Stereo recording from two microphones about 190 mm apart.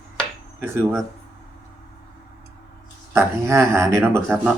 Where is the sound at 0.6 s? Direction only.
15° right (ahead or behind).